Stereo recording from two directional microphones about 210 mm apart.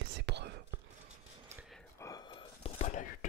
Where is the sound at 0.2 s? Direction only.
55° right (ahead or behind).